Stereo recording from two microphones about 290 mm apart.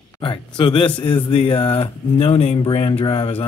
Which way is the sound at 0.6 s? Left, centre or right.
Centre.